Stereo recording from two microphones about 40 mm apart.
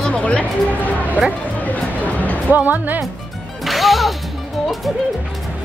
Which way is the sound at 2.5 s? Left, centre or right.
Right.